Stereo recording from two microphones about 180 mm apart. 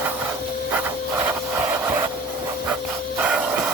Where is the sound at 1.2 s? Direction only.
10° right (ahead or behind).